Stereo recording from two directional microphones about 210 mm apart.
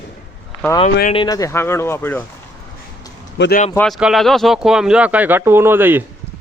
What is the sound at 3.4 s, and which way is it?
Speech, 45° left (ahead or behind).